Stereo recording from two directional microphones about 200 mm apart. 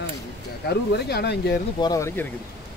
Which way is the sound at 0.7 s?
55° left (ahead or behind).